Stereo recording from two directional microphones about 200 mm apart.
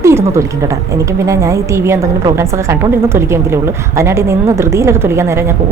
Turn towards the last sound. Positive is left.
turn(degrees=-15)  # may be behind; listen again after turning